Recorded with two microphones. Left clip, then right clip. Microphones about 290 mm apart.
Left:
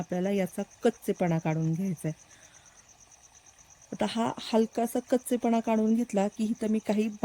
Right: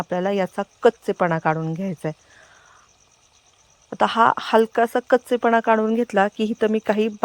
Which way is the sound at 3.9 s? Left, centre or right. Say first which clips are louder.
Right 14 dB; right.